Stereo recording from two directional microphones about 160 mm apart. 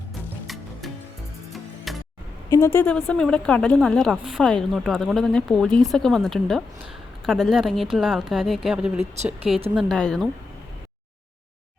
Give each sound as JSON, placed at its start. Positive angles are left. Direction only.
{"t": 0.4, "sound": "music", "side_deg": 0}
{"t": 2.5, "sound": "a woman's voice", "side_deg": 20}
{"t": 2.8, "sound": "speech", "side_deg": 5}
{"t": 9.0, "sound": "speech", "side_deg": -45}
{"t": 9.7, "sound": "speech", "side_deg": 0}